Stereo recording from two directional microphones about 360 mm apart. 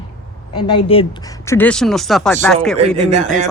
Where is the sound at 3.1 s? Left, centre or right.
Right.